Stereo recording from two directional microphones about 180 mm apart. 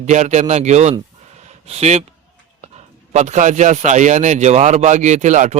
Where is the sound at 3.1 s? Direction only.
40° right (ahead or behind).